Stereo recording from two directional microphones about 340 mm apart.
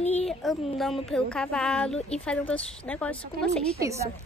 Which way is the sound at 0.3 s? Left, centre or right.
Centre.